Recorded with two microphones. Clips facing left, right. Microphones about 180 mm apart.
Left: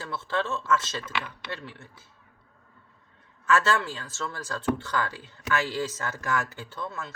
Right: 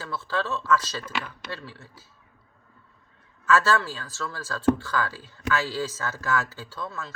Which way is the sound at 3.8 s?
25° left (ahead or behind).